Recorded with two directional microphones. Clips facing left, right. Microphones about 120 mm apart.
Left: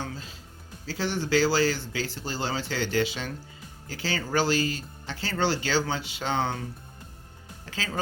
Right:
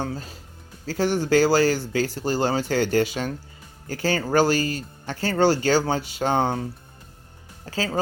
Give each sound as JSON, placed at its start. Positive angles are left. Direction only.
{"t": 0.0, "sound": "speech", "side_deg": -45}
{"t": 7.6, "sound": "speech", "side_deg": -35}